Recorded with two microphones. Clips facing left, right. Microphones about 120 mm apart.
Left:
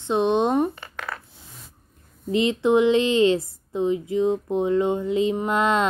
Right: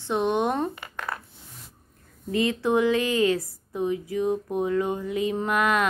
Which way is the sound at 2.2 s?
20° left (ahead or behind).